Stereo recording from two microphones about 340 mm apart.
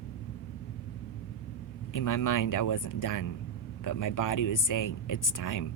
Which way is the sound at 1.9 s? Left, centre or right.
Left.